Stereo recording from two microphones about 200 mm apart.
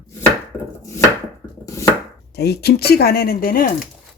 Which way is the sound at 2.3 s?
55° left (ahead or behind).